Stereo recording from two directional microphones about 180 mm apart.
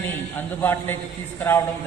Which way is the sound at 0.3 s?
10° left (ahead or behind).